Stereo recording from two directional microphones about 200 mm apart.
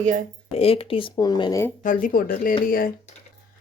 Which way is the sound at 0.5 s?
30° left (ahead or behind).